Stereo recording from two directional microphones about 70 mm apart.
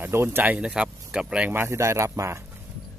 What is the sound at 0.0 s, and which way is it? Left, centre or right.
Speech, right.